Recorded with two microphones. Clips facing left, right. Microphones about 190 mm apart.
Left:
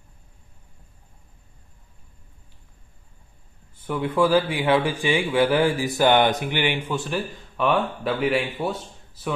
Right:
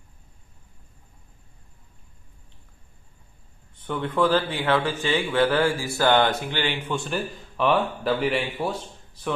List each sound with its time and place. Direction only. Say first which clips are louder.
3.7 s speech: left 2 dB; 10° left (ahead or behind)